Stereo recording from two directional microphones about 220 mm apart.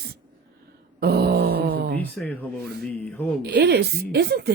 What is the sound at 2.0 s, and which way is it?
Speech, 5° left (ahead or behind).